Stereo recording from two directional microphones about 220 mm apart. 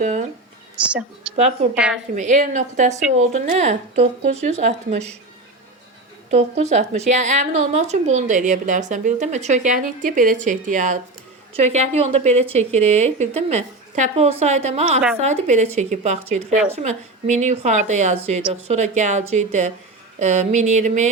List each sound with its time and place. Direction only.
0.0 s a woman's voice: 35° right (ahead or behind)
0.8 s a woman's voice: 5° right (ahead or behind)
2.1 s a woman's voice: 35° right (ahead or behind)
6.3 s a woman's voice: 30° right (ahead or behind)